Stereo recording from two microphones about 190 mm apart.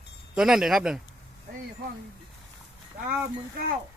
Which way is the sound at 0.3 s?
Centre (ahead or behind).